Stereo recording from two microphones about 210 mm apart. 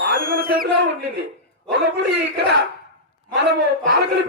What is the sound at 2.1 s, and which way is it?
A man's voice, 55° right (ahead or behind).